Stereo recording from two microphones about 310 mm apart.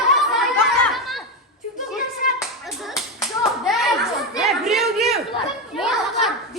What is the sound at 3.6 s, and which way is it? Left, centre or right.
Clapping, centre.